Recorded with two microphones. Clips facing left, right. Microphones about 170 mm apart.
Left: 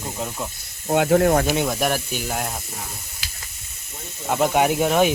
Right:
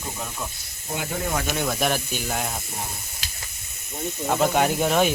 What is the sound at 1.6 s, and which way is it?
Speech, 10° left (ahead or behind).